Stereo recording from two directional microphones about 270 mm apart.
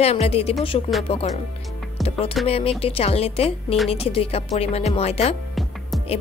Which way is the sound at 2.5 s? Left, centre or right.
Left.